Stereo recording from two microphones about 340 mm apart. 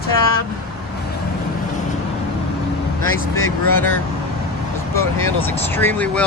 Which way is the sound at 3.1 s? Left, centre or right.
Left.